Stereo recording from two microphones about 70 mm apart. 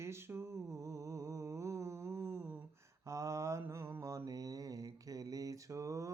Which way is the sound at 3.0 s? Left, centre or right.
Right.